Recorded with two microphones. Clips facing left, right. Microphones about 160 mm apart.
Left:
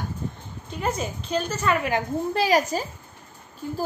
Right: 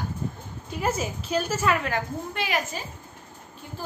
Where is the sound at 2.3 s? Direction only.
35° left (ahead or behind).